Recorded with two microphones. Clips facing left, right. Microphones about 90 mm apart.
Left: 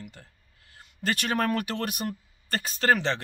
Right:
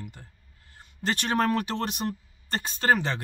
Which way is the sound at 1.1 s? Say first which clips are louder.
Right 1 dB; 30° right (ahead or behind).